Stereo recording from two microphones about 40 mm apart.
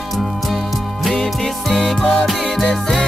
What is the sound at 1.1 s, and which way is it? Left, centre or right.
Music, centre.